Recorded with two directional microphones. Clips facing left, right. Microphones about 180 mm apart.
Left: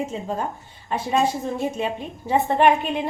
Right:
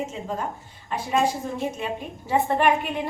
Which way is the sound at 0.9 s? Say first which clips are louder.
Left 2 dB; 25° left (ahead or behind).